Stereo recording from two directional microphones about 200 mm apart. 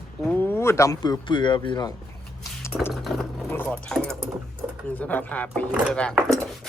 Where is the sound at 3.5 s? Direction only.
10° left (ahead or behind).